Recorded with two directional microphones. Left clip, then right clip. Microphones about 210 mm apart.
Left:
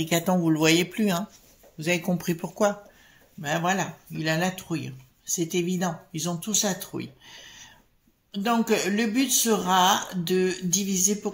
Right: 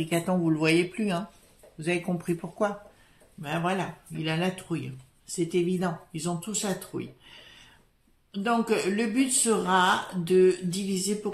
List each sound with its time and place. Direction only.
0.0 s speech: 40° left (ahead or behind)